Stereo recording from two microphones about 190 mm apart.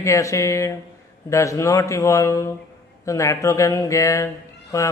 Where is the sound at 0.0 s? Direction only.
15° left (ahead or behind).